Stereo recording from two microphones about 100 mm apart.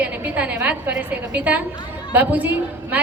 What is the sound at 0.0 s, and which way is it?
A woman's voice, 15° right (ahead or behind).